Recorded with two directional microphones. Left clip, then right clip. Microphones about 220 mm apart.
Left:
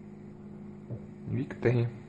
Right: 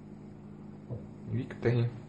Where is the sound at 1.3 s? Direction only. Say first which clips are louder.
Left 3 dB; 20° left (ahead or behind).